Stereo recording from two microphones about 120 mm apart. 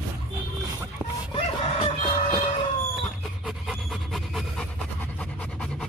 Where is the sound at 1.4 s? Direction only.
55° left (ahead or behind).